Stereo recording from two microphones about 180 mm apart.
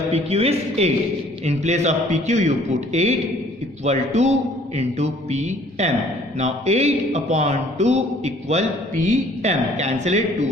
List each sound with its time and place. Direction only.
0.1 s a man's voice: 35° right (ahead or behind)